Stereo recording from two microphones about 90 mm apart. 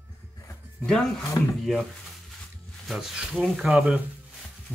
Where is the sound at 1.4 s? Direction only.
45° left (ahead or behind).